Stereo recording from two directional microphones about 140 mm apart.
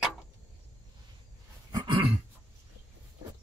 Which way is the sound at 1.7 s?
35° right (ahead or behind).